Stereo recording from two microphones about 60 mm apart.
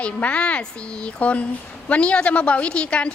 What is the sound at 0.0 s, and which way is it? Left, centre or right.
A woman's voice, left.